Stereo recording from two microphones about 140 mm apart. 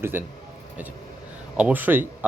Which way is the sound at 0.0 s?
15° right (ahead or behind).